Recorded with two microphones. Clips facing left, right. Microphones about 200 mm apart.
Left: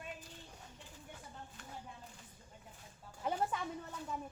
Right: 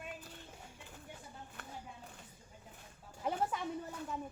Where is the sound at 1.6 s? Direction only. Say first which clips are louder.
Right 2 dB; 60° right (ahead or behind).